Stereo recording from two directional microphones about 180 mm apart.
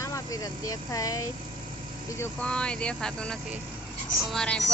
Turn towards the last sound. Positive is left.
turn(degrees=5)  # may be behind; listen again after turning